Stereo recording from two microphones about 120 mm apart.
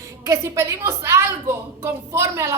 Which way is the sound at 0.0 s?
25° right (ahead or behind).